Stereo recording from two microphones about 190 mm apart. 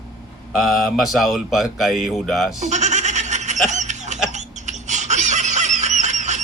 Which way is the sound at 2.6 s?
40° right (ahead or behind).